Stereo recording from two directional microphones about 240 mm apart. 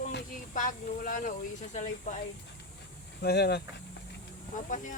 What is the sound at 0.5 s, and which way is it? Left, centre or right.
Speech, left.